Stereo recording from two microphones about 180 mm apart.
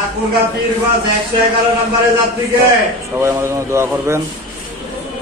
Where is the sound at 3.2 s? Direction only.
15° right (ahead or behind).